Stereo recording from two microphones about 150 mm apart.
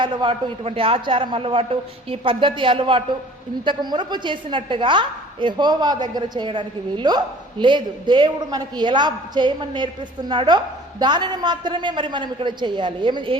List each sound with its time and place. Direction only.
0.0 s a woman's voice: 30° right (ahead or behind)